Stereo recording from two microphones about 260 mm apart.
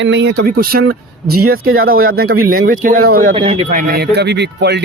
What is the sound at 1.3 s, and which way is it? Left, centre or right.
Speech, right.